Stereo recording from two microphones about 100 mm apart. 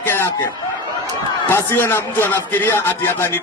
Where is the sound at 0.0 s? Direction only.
25° left (ahead or behind).